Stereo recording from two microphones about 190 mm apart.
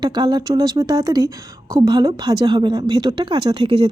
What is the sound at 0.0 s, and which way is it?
A woman's voice, 20° right (ahead or behind).